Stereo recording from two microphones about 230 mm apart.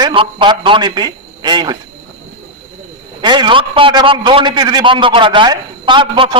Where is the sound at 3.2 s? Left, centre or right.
Centre.